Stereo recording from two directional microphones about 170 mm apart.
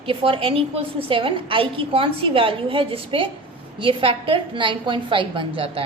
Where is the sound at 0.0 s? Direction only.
30° right (ahead or behind).